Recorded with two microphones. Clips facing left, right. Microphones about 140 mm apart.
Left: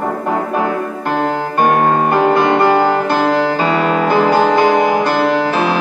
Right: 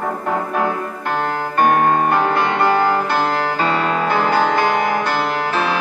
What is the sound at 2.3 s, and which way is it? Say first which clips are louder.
Music: left 5 dB; 35° left (ahead or behind).